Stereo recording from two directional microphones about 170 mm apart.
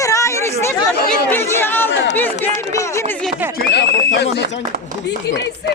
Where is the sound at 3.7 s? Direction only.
80° left.